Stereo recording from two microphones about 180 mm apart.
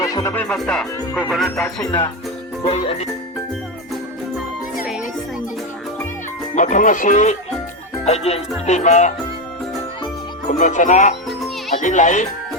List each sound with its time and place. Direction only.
0.0 s music: 20° left (ahead or behind)
0.3 s speech: 5° left (ahead or behind)
2.6 s music: 35° left (ahead or behind)
6.6 s speech: 45° left (ahead or behind)
8.0 s music: 35° left (ahead or behind)
10.6 s speech: 45° left (ahead or behind)